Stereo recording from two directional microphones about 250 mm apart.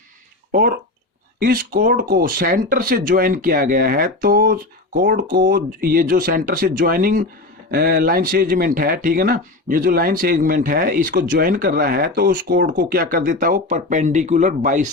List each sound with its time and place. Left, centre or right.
1.4 s speech: right